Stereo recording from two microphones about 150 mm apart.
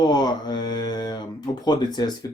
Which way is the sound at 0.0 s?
30° left (ahead or behind).